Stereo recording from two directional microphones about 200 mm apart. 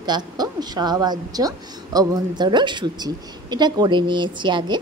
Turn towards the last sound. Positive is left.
turn(degrees=-25)  # may be behind; listen again after turning